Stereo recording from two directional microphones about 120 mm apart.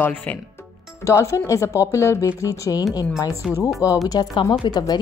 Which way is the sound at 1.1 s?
25° left (ahead or behind).